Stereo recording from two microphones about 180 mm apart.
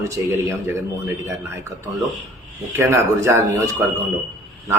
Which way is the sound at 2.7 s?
15° right (ahead or behind).